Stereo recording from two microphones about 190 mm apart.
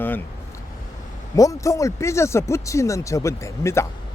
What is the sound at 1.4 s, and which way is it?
Speech, 15° left (ahead or behind).